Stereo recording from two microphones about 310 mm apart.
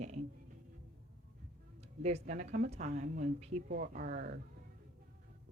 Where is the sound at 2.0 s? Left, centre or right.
Right.